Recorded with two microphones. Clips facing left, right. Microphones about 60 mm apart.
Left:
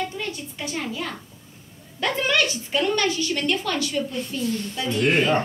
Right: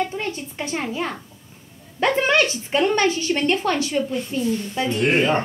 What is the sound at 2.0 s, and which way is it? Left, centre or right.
A woman's voice, right.